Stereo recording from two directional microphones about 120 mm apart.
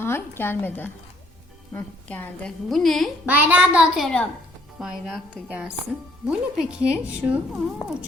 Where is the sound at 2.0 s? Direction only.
10° left (ahead or behind).